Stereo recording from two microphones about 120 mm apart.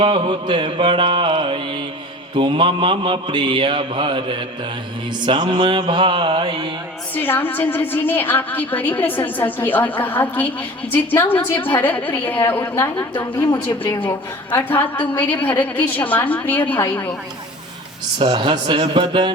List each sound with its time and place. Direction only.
0.0 s mantra: 40° right (ahead or behind)
7.1 s a woman's voice: 15° left (ahead or behind)
18.2 s mantra: 45° right (ahead or behind)